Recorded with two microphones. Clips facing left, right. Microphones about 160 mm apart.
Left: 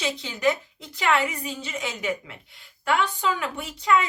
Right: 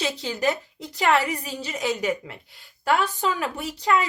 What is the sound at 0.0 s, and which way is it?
Speech, 35° right (ahead or behind).